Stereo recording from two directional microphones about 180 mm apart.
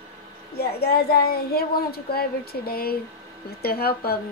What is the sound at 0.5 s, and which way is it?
Speech, 60° left (ahead or behind).